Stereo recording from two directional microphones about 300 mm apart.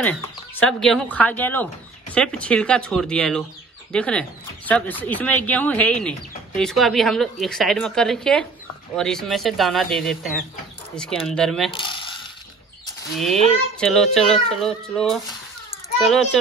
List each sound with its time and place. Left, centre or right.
0.6 s speech: centre
11.7 s speech: centre
13.1 s speech: centre